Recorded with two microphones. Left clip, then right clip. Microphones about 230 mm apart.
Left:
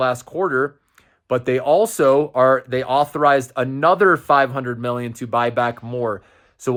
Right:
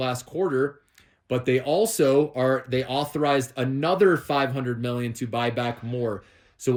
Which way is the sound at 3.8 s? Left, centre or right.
Centre.